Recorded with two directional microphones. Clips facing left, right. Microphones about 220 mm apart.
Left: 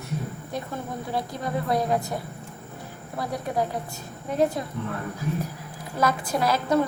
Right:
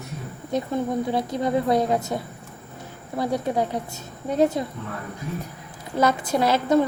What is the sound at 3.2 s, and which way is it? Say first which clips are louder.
A woman's voice: right 4 dB; 25° right (ahead or behind).